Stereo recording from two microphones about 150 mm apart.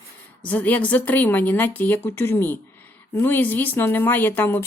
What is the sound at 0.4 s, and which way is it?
A woman's voice, 10° left (ahead or behind).